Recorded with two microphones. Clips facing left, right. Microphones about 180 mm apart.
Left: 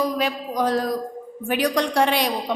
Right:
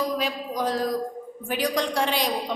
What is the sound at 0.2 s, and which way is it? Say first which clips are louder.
A woman's voice: left 4 dB; 65° left (ahead or behind).